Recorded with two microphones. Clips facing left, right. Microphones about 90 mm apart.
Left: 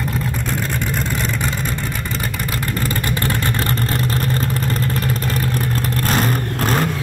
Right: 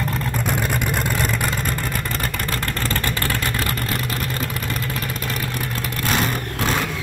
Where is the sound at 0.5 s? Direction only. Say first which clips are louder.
Even; 15° right (ahead or behind).